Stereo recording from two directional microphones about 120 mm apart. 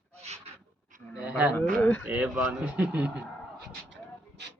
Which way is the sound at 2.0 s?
10° right (ahead or behind).